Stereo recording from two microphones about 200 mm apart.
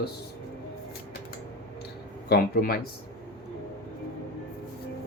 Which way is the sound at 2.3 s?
50° left (ahead or behind).